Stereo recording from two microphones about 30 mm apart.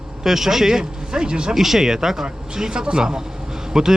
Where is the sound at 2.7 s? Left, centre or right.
Right.